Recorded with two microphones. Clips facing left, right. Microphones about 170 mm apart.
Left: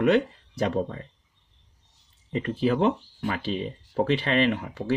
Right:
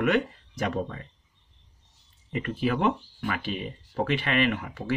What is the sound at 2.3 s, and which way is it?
Speech, 30° left (ahead or behind).